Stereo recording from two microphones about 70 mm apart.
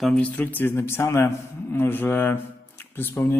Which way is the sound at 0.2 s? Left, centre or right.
Left.